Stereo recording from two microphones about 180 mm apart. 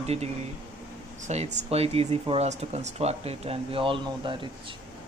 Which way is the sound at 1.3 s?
40° right (ahead or behind).